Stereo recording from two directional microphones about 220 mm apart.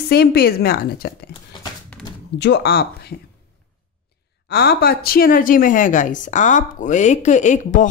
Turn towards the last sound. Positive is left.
turn(degrees=35)  # may be behind; listen again after turning